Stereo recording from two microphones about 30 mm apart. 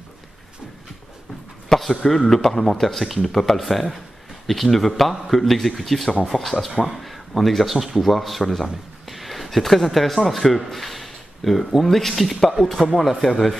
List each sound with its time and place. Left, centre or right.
1.7 s a sound: centre
2.0 s speech: centre
6.2 s speech: centre
6.9 s speech: centre